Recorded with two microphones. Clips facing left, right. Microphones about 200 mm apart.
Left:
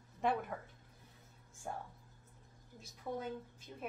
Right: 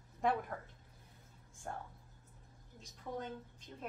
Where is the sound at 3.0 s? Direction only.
10° left (ahead or behind).